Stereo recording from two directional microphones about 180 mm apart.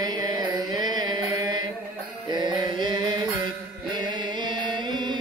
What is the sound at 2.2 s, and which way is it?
Mantra, 25° right (ahead or behind).